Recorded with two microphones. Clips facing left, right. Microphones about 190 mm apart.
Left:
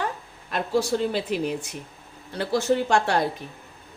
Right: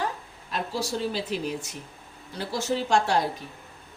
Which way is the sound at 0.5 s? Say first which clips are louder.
Left 6 dB; 60° left (ahead or behind).